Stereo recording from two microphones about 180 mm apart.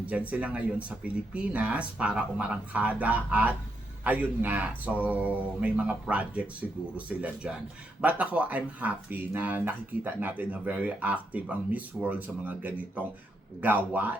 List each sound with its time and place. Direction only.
0.3 s speech: 10° right (ahead or behind)